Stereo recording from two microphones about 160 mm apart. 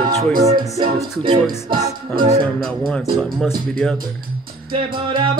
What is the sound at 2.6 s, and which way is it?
Speech, 5° left (ahead or behind).